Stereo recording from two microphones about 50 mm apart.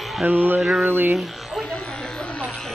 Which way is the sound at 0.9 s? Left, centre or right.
Right.